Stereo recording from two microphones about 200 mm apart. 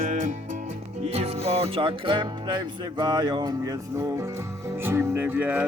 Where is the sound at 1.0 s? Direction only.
30° right (ahead or behind).